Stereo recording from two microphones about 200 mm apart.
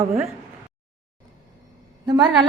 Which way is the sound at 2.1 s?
20° right (ahead or behind).